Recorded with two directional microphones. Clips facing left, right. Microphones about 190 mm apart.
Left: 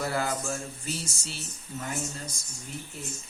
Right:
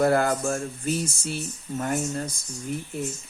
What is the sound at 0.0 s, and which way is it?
Speech, 55° right (ahead or behind).